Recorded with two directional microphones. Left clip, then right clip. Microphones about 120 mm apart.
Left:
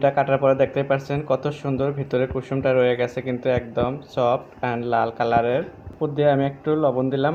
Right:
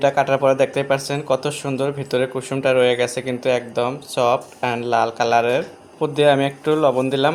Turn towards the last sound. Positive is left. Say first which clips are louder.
# right 4 dB
turn(degrees=-30)  # may be behind; listen again after turning